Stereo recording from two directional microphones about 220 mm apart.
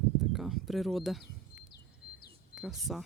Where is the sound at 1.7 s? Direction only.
45° left (ahead or behind).